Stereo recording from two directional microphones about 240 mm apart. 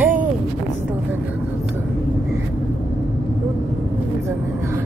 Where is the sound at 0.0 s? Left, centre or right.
Centre.